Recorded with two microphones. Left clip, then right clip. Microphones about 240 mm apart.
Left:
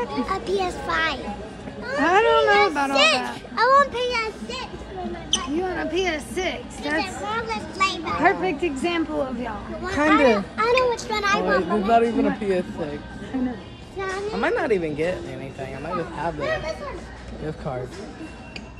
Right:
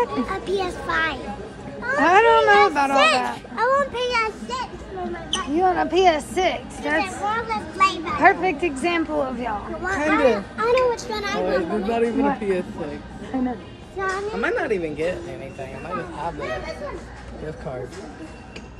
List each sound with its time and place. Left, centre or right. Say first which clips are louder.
0.0 s speech: right 2 dB; centre
3.6 s speech: left 3 dB; centre
12.4 s speech: even; left
13.3 s speech: right 2 dB; centre
14.4 s speech: left 2 dB; left
16.3 s speech: left 3 dB; centre